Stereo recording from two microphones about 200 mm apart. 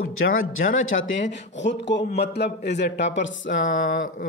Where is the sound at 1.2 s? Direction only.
60° left (ahead or behind).